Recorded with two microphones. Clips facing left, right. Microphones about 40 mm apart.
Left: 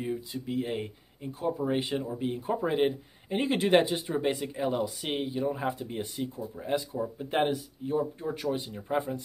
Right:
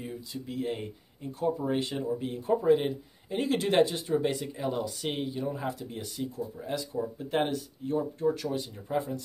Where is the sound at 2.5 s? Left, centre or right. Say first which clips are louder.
Right 4 dB; left.